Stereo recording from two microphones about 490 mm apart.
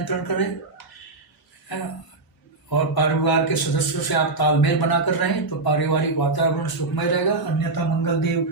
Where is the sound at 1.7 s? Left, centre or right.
Left.